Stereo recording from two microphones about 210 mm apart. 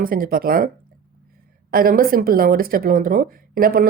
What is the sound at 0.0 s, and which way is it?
Speech, 45° right (ahead or behind).